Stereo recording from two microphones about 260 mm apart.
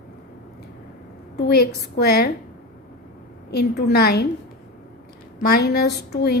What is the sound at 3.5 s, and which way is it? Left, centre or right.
Speech, left.